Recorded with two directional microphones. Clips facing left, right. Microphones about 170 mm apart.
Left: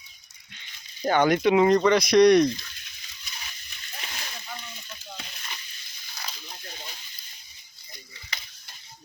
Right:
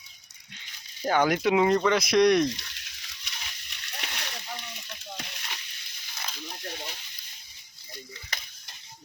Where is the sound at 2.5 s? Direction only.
75° right (ahead or behind).